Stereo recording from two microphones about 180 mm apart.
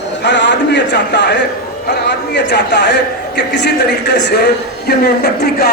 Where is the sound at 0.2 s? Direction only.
75° left (ahead or behind).